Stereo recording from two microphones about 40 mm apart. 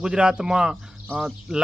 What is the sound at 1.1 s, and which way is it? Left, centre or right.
Speech, left.